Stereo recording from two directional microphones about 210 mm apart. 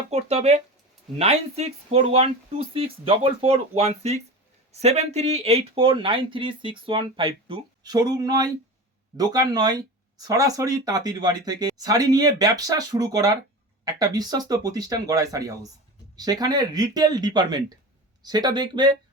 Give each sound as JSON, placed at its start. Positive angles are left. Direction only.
{"t": 0.1, "sound": "speech", "side_deg": -30}